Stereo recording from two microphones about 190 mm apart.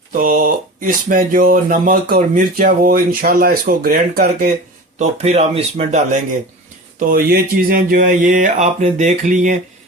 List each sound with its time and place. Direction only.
0.1 s speech: 45° right (ahead or behind)
4.9 s speech: 35° right (ahead or behind)